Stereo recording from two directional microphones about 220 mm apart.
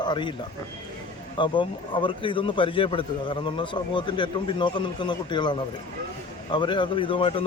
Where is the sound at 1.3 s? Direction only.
20° left (ahead or behind).